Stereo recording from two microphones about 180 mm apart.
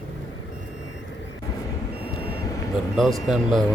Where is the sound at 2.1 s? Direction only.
20° left (ahead or behind).